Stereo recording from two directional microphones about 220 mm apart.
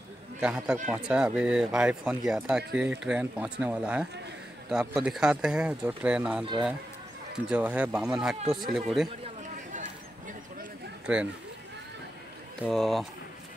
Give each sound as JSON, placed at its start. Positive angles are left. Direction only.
{"t": 0.4, "sound": "speech", "side_deg": -5}
{"t": 7.4, "sound": "speech", "side_deg": -5}
{"t": 9.2, "sound": "a sound", "side_deg": -35}
{"t": 11.1, "sound": "speech", "side_deg": -5}
{"t": 12.6, "sound": "speech", "side_deg": 0}